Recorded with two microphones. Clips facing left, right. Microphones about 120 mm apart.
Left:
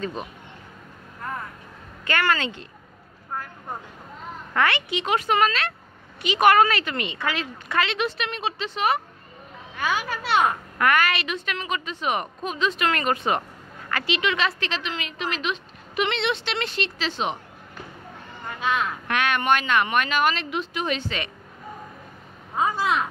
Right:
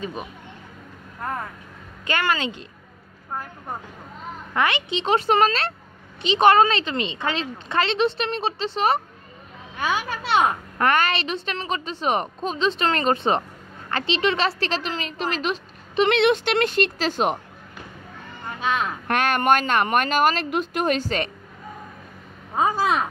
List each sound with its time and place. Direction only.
0.0 s speech: 10° right (ahead or behind)
2.0 s speech: 20° right (ahead or behind)
4.6 s a woman's voice: 20° right (ahead or behind); by 16.1 s 40° right (ahead or behind)
16.1 s speech: 55° right (ahead or behind)
18.8 s a woman's voice: 35° right (ahead or behind)
22.8 s speech: 40° right (ahead or behind)